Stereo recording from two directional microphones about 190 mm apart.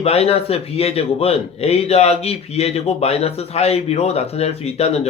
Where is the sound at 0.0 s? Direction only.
30° left (ahead or behind).